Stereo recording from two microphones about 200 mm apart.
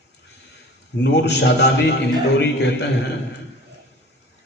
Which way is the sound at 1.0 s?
60° left (ahead or behind).